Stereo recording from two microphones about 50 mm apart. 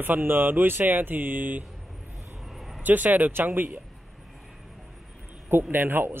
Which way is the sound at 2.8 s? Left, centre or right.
Right.